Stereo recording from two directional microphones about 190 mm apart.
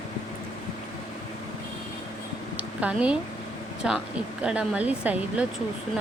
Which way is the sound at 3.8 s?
5° right (ahead or behind).